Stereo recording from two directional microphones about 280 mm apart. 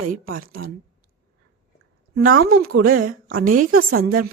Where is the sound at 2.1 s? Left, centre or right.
Right.